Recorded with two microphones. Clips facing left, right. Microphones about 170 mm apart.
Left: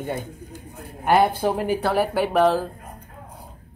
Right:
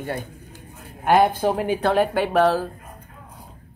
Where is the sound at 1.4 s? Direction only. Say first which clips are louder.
Right 1 dB; 15° right (ahead or behind).